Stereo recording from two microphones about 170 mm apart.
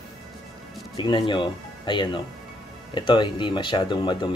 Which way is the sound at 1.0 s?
30° left (ahead or behind).